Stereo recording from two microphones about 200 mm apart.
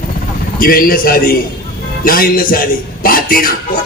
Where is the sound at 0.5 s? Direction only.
45° left (ahead or behind).